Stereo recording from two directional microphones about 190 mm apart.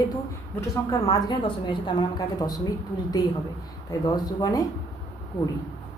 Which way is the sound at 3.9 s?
20° left (ahead or behind).